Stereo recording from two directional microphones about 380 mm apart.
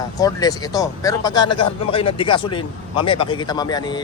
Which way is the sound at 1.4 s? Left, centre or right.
Left.